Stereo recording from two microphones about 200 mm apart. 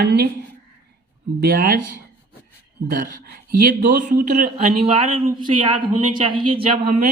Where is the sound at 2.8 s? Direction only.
45° right (ahead or behind); by 5.0 s 30° right (ahead or behind).